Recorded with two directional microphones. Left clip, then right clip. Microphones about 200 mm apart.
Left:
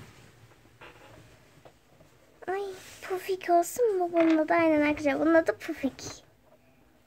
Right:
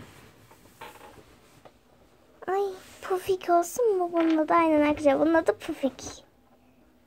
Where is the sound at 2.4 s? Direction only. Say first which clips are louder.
Right 5 dB; 15° right (ahead or behind).